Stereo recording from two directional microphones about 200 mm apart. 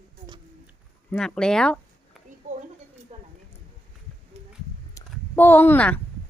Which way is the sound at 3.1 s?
35° right (ahead or behind).